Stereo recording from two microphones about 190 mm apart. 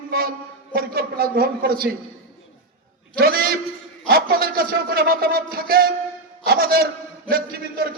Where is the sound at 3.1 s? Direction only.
50° right (ahead or behind).